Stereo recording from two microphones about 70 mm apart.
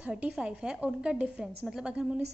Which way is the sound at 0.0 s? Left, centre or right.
Centre.